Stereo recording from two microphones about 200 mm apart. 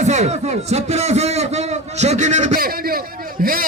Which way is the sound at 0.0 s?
35° right (ahead or behind).